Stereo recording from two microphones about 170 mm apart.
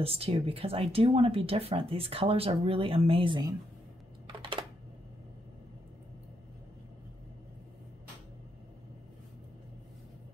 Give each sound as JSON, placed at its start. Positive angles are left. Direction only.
{"t": 0.0, "sound": "speech", "side_deg": -35}
{"t": 4.4, "sound": "computer keyboard", "side_deg": -30}